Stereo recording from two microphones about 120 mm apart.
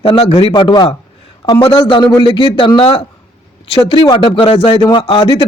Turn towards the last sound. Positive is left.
turn(degrees=50)  # may be behind; listen again after turning